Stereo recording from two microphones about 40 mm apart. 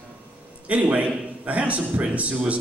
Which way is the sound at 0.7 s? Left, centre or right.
Right.